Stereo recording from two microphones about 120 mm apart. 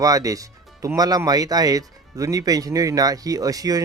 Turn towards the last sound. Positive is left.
turn(degrees=-30)  # may be behind; listen again after turning